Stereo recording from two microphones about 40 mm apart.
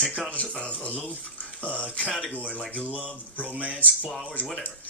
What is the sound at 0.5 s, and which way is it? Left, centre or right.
Speech, left.